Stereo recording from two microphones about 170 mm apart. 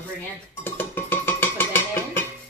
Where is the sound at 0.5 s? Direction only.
10° left (ahead or behind).